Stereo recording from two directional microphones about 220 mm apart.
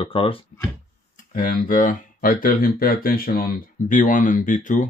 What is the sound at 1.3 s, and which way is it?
Speech, 40° left (ahead or behind).